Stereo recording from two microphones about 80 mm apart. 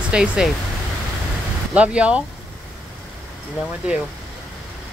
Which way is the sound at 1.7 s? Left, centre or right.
Centre.